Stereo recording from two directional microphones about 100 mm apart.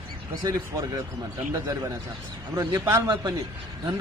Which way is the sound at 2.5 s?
30° right (ahead or behind).